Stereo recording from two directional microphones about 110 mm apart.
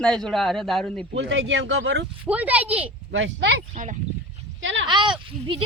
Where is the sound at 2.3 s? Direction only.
15° right (ahead or behind).